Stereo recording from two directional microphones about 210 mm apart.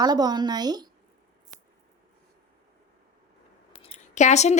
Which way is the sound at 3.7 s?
30° left (ahead or behind).